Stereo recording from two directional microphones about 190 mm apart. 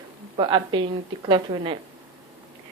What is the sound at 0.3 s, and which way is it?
A woman's voice, 25° right (ahead or behind).